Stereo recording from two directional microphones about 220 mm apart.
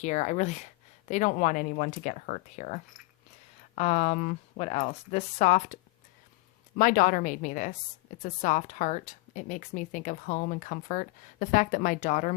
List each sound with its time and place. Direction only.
0.0 s a woman's voice: 30° left (ahead or behind)